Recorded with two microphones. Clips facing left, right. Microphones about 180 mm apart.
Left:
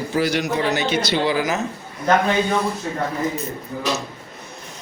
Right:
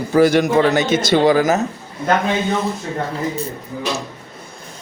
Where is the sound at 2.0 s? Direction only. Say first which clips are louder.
Even; 25° right (ahead or behind).